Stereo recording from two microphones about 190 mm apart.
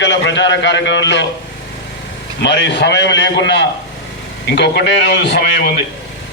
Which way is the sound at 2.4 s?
65° left (ahead or behind).